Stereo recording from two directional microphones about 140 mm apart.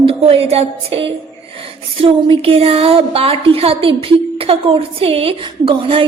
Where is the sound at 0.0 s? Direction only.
40° right (ahead or behind).